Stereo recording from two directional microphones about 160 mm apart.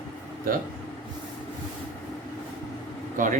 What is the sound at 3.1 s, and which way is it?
Speech, 55° right (ahead or behind).